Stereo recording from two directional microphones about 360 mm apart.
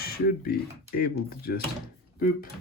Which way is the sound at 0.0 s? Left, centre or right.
Left.